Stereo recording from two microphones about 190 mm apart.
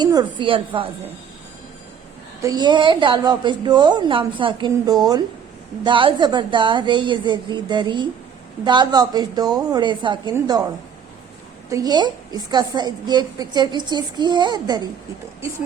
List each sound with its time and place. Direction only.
0.0 s a woman's voice: 20° right (ahead or behind)
2.4 s a woman's voice: 20° right (ahead or behind)
11.7 s a woman's voice: 20° right (ahead or behind)